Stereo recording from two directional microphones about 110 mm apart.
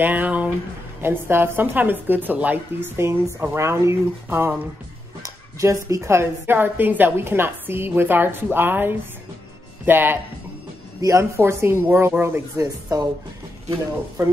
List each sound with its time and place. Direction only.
0.0 s a woman's voice: 15° right (ahead or behind)
13.7 s a woman's voice: 25° right (ahead or behind)